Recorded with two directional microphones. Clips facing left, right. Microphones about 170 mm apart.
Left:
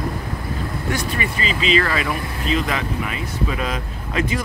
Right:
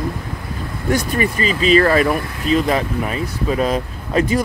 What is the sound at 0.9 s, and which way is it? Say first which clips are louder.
Speech: right 8 dB; 45° right (ahead or behind).